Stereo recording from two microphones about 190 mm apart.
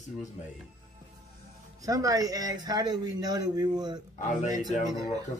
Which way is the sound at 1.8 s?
20° right (ahead or behind).